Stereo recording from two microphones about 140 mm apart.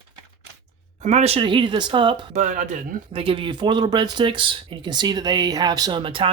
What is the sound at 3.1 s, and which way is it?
Speech, 40° right (ahead or behind).